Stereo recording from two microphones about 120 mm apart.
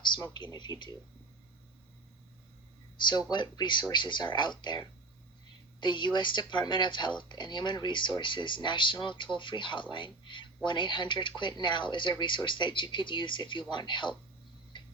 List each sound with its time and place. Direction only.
0.3 s speech: 40° left (ahead or behind)
3.0 s speech: 35° left (ahead or behind)